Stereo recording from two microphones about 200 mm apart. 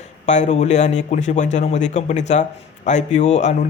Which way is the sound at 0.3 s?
35° left (ahead or behind).